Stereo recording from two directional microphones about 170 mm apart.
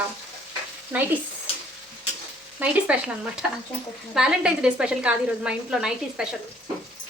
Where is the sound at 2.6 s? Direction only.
5° right (ahead or behind).